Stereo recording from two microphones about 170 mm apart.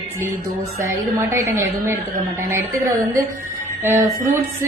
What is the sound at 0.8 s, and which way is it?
A woman's voice, 15° right (ahead or behind).